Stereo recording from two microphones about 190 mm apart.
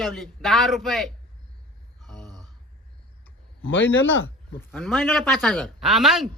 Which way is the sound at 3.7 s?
75° left (ahead or behind).